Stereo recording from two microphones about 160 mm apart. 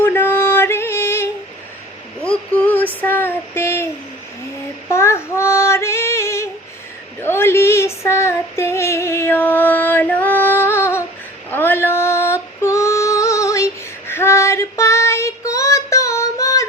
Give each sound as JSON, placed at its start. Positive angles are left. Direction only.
{"t": 0.0, "sound": "music", "side_deg": 15}
{"t": 2.2, "sound": "a sound", "side_deg": 10}
{"t": 4.9, "sound": "female singing", "side_deg": 15}